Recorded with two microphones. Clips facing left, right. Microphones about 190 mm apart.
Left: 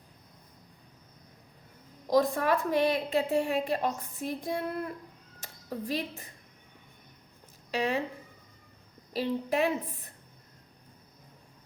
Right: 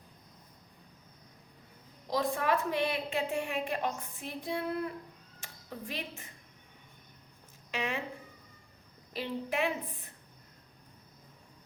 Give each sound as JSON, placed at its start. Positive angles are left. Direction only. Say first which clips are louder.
{"t": 2.0, "sound": "a woman's voice", "louder": "left 5 dB", "side_deg": 45}
{"t": 5.4, "sound": "a sound", "louder": "left 7 dB", "side_deg": 35}
{"t": 7.7, "sound": "a woman's voice", "louder": "left 6 dB", "side_deg": 35}
{"t": 9.1, "sound": "a woman's voice", "louder": "left 5 dB", "side_deg": 35}